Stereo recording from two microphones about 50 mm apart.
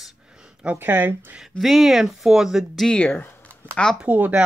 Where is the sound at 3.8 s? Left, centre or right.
Centre.